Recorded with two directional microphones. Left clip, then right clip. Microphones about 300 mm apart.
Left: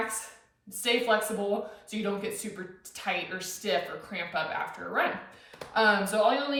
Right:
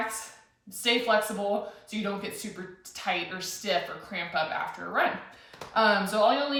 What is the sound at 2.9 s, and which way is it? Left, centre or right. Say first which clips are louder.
Speech: right 1 dB; centre.